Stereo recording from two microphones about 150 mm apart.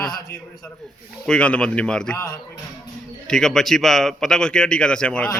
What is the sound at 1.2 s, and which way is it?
Speech, 10° left (ahead or behind).